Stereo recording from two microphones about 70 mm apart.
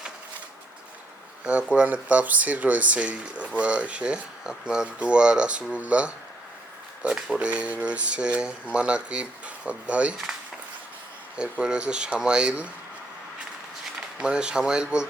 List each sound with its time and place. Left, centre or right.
1.7 s speech: centre
11.6 s speech: centre
14.2 s speech: centre